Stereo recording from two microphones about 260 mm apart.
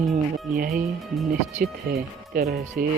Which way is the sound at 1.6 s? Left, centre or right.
Right.